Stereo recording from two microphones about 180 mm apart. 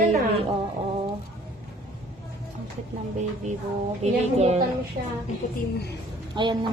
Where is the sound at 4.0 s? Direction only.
35° right (ahead or behind).